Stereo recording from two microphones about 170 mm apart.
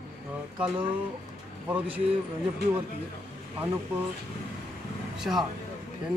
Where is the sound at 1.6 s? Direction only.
10° right (ahead or behind).